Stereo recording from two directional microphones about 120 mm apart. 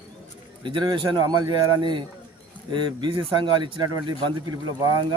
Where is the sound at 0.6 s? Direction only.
45° right (ahead or behind).